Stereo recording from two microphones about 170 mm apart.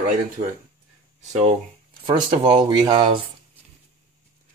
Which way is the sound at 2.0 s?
25° right (ahead or behind).